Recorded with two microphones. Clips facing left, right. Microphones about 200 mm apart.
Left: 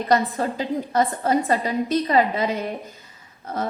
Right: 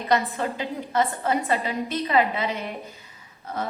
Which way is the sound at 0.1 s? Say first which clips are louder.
Left 2 dB; 40° left (ahead or behind).